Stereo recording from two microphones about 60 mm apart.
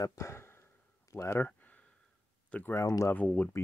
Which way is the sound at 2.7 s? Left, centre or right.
Left.